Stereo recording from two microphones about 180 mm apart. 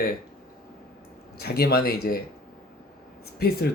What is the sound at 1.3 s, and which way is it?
Speech, 60° left (ahead or behind).